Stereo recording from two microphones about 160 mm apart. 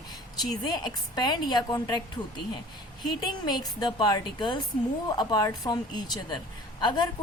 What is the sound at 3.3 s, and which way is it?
Speech, 25° left (ahead or behind).